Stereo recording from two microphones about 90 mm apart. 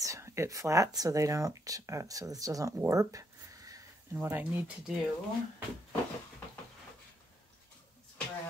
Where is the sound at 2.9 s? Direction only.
40° right (ahead or behind).